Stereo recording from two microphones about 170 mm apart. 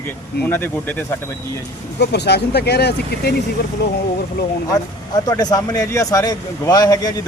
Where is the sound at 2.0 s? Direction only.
75° left (ahead or behind).